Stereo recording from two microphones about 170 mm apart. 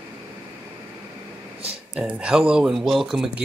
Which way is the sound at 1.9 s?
5° right (ahead or behind).